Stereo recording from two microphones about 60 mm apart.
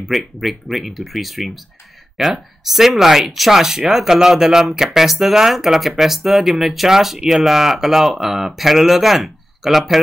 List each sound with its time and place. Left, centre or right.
0.1 s speech: centre